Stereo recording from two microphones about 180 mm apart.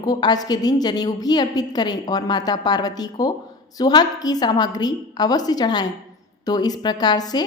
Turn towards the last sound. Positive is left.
turn(degrees=20)  # may be behind; listen again after turning